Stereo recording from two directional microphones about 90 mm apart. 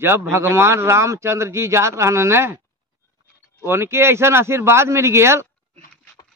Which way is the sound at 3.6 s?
25° right (ahead or behind).